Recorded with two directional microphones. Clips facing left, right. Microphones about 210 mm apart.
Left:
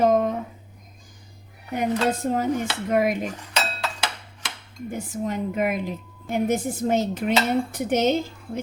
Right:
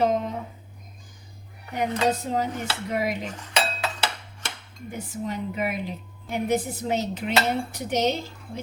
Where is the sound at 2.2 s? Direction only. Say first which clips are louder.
Left 4 dB; 50° left (ahead or behind).